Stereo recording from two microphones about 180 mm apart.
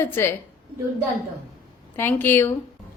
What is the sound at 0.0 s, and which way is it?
Speech, 15° left (ahead or behind).